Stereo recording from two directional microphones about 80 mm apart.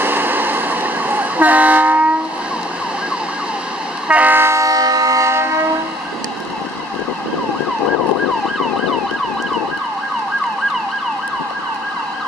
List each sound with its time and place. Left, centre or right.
0.0 s vehicle: right
4.1 s train: right